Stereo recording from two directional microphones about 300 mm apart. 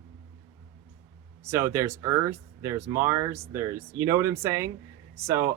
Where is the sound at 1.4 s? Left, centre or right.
Centre.